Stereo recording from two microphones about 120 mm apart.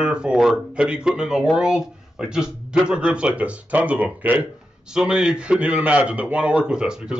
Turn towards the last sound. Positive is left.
turn(degrees=-5)  # may be behind; listen again after turning